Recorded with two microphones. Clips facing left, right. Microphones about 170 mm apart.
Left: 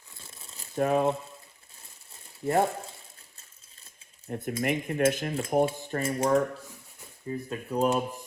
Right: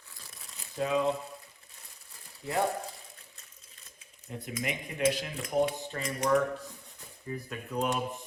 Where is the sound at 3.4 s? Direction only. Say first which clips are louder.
Right 2 dB; 35° left (ahead or behind).